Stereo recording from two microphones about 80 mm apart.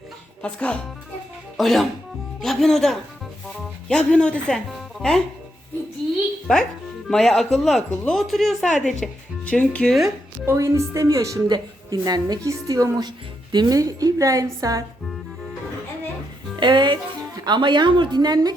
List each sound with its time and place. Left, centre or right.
0.4 s speech: centre
1.5 s speech: centre
6.5 s speech: centre
10.4 s speech: right
11.4 s a woman's voice: right
12.5 s speech: right
13.0 s a woman's voice: right
16.6 s speech: right